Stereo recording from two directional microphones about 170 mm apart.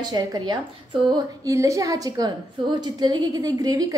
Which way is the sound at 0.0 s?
25° right (ahead or behind).